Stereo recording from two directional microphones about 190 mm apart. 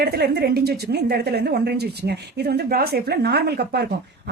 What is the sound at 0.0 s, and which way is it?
A woman's voice, 55° right (ahead or behind).